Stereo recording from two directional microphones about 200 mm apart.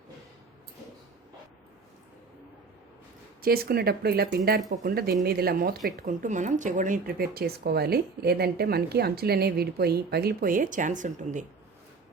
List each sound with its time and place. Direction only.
3.4 s speech: 50° right (ahead or behind)
6.0 s speech: 40° right (ahead or behind)